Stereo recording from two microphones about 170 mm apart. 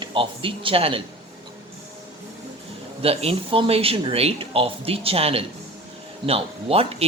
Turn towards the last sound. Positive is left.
turn(degrees=-35)  # may be behind; listen again after turning